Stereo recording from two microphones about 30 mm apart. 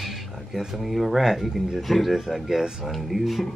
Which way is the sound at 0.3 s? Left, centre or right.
Centre.